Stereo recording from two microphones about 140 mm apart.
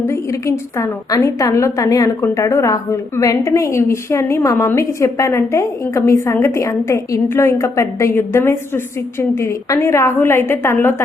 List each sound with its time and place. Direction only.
0.0 s a woman's voice: 20° left (ahead or behind)